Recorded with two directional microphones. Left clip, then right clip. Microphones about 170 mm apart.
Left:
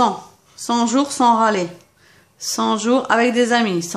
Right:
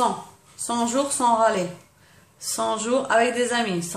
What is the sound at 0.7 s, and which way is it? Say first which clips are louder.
A woman's voice: left 5 dB; 45° left (ahead or behind).